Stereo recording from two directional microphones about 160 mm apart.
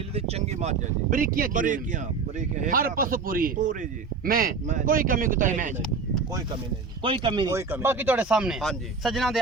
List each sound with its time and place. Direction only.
0.1 s speech: 40° right (ahead or behind)
1.2 s speech: 60° right (ahead or behind)
7.0 s speech: 30° right (ahead or behind)
7.5 s speech: 15° right (ahead or behind)